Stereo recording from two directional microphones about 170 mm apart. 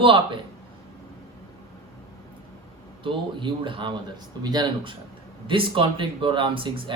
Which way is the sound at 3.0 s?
30° right (ahead or behind).